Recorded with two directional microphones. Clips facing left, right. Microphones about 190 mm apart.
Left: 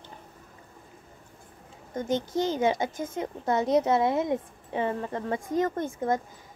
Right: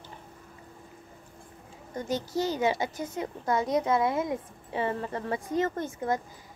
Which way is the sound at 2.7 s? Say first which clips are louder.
Left 2 dB; 50° left (ahead or behind).